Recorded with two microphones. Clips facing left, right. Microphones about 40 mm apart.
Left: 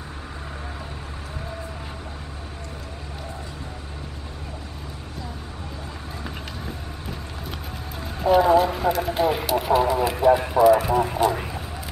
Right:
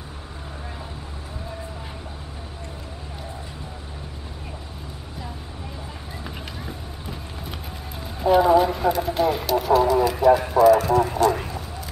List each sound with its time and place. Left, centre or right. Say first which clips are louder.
6.2 s run: even; centre
8.0 s speech: even; centre